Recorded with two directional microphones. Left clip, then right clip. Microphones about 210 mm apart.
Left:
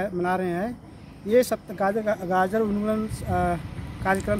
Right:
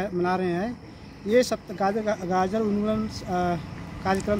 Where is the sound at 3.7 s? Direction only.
40° right (ahead or behind).